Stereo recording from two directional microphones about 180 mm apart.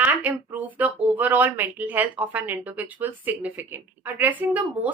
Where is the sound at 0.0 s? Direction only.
10° right (ahead or behind).